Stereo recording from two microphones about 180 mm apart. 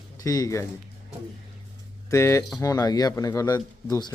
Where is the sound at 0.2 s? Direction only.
20° left (ahead or behind).